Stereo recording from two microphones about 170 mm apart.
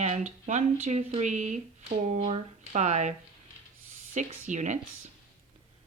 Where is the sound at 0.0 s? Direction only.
45° right (ahead or behind).